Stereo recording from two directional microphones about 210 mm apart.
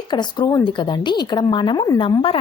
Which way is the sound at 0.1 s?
20° left (ahead or behind).